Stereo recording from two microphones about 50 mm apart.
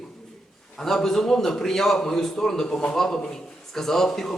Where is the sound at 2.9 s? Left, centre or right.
Centre.